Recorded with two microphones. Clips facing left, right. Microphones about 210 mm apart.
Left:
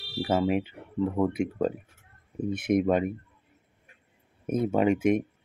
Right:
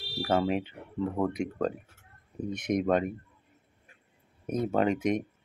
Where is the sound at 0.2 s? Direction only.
5° left (ahead or behind).